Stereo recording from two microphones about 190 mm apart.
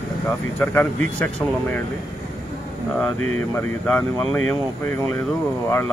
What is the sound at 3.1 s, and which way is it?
Speech, 90° left.